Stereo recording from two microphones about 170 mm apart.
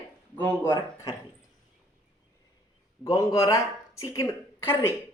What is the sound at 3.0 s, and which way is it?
Speech, 20° left (ahead or behind).